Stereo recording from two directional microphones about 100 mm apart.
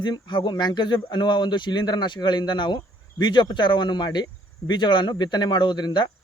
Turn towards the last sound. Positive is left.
turn(degrees=45)  # may be behind; listen again after turning